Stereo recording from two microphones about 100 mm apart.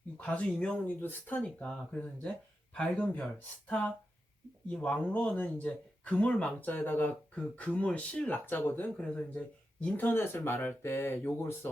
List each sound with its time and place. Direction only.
0.2 s speech: 10° left (ahead or behind)
9.0 s speech: 10° left (ahead or behind)